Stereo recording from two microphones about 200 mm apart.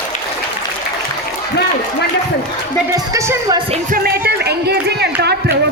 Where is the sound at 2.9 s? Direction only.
15° right (ahead or behind).